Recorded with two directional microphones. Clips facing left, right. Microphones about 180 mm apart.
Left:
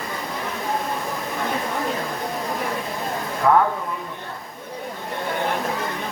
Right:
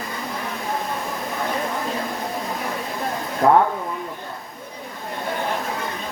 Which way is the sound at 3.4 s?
40° right (ahead or behind).